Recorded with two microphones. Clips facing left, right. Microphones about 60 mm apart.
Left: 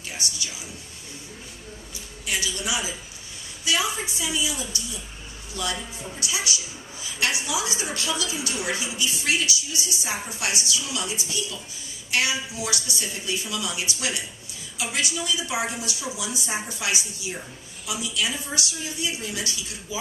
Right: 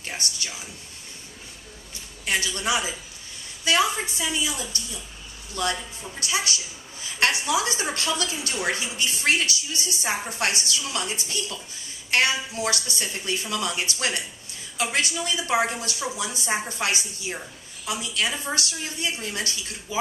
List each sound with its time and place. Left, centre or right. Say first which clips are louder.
0.0 s speech: right 1 dB; right
1.9 s a man's voice: right 4 dB; right